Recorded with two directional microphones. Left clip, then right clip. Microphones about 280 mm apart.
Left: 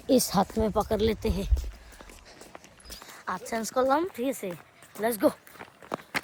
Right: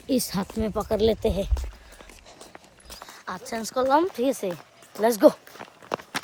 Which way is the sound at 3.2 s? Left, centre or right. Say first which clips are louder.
Left 1 dB; centre.